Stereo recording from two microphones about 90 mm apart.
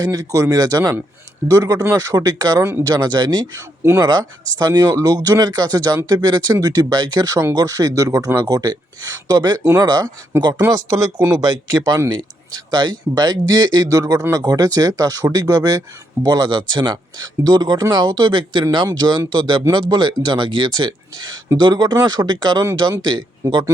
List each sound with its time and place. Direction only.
0.0 s speech: 40° right (ahead or behind)
2.6 s speech: 30° right (ahead or behind)
2.8 s speech: 45° right (ahead or behind)
10.7 s speech: 40° right (ahead or behind)